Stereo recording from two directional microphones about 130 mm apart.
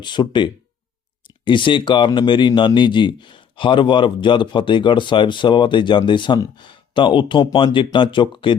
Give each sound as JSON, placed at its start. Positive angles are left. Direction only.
{"t": 0.0, "sound": "speech", "side_deg": 35}